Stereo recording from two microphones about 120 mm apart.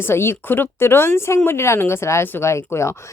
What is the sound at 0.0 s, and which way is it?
A woman's voice, 20° left (ahead or behind).